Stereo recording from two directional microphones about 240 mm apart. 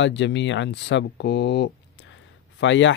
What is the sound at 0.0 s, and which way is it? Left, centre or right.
Speech, left.